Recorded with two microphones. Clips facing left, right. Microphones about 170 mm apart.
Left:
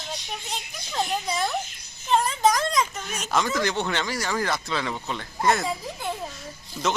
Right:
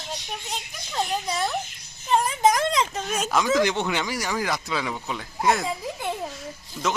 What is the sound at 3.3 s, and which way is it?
Speech, 5° right (ahead or behind).